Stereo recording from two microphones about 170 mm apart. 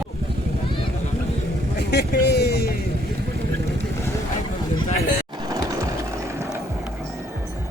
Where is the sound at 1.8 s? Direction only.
75° left (ahead or behind).